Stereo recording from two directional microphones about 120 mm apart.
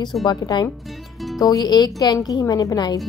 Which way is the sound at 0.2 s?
35° left (ahead or behind).